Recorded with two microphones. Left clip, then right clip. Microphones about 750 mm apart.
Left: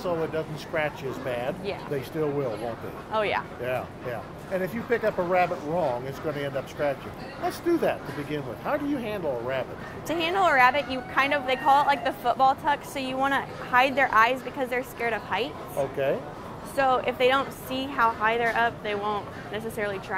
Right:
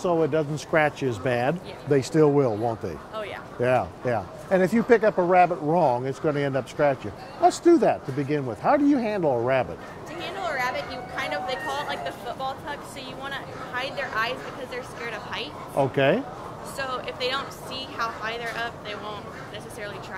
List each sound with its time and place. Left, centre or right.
0.0 s speech: right
3.1 s a woman's voice: left
3.6 s speech: right
10.0 s a woman's voice: left
16.7 s a woman's voice: left